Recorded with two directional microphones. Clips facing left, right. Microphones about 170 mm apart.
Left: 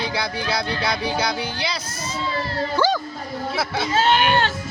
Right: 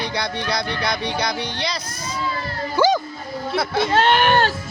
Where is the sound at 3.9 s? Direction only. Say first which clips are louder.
Right 1 dB; 60° right (ahead or behind).